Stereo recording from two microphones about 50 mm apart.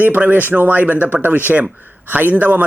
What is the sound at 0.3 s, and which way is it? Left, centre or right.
A man's voice, right.